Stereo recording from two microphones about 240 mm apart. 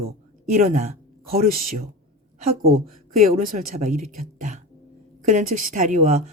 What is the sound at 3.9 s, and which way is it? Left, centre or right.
Speech, right.